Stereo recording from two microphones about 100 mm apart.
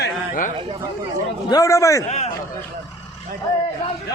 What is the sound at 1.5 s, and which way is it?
Speech, 35° left (ahead or behind).